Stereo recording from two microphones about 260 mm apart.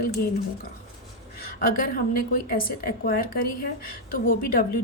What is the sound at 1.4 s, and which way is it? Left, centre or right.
A woman's voice, left.